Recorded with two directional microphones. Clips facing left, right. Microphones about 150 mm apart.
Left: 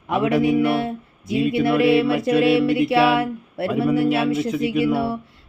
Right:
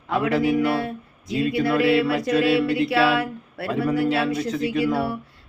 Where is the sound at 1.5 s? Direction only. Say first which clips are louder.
Left 2 dB; 25° left (ahead or behind).